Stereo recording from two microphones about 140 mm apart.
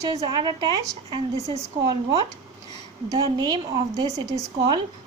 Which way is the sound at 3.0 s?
30° right (ahead or behind).